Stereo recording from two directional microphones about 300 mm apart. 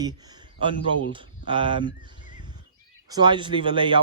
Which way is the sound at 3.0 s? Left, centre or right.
Centre.